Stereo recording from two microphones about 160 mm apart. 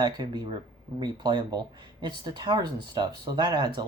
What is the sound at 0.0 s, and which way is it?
Speech, 25° right (ahead or behind).